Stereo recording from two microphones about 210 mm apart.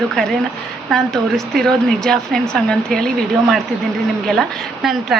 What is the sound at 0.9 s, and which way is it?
A woman's voice, centre (ahead or behind).